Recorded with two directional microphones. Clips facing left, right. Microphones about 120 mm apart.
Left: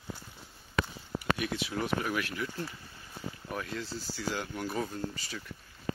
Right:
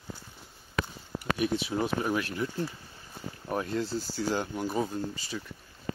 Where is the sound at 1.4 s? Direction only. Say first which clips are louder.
Right 5 dB; 25° right (ahead or behind).